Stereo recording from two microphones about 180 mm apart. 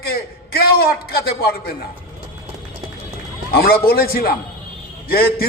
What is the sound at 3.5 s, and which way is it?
A man's voice, 55° left (ahead or behind).